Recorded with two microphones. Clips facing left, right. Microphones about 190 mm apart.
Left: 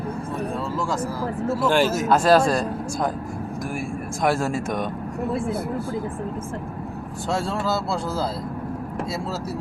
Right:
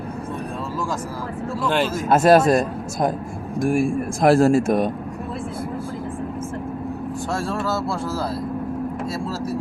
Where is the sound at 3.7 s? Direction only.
90° right.